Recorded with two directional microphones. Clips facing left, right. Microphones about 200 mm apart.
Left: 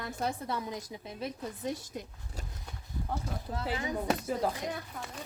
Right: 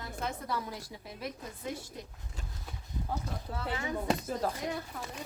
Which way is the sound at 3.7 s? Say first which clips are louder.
Left 1 dB; 20° left (ahead or behind).